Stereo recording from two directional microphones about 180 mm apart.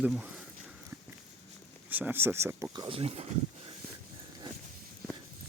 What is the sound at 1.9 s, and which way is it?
Speech, 10° right (ahead or behind).